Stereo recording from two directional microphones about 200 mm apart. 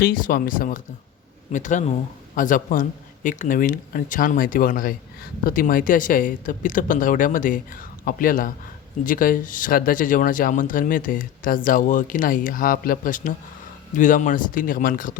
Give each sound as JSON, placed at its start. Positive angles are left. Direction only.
{"t": 0.0, "sound": "speech", "side_deg": 45}